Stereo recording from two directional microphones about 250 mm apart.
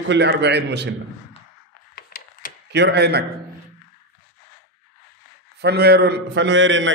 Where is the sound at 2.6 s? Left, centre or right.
Right.